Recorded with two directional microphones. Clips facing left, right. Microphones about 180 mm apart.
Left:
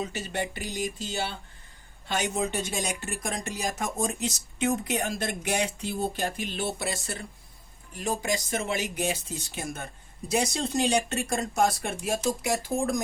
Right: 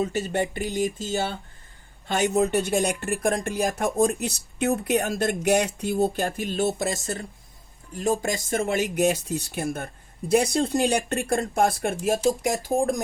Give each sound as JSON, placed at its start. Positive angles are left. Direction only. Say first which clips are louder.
{"t": 0.0, "sound": "speech", "louder": "right 7 dB", "side_deg": -50}